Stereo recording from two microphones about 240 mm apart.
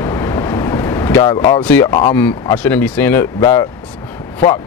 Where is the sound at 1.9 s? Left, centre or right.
Centre.